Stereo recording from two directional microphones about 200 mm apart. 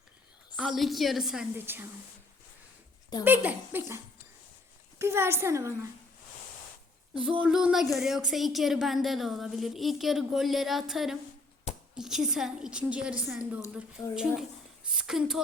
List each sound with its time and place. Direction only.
0.5 s a woman's voice: centre (ahead or behind)
3.2 s speech: 10° right (ahead or behind)
7.1 s a woman's voice: 5° right (ahead or behind)
14.0 s speech: 20° left (ahead or behind)
14.8 s a woman's voice: 5° right (ahead or behind)